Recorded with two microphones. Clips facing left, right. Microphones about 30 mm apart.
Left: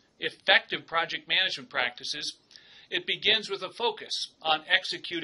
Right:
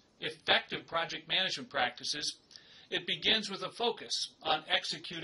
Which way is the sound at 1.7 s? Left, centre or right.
Left.